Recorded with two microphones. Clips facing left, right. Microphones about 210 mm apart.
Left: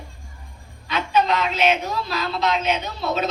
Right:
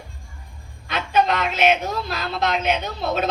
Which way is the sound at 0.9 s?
50° right (ahead or behind).